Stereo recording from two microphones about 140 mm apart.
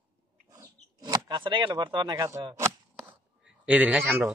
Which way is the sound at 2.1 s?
20° right (ahead or behind).